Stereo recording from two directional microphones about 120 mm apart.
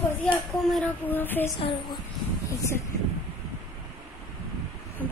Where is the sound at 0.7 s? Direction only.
15° left (ahead or behind).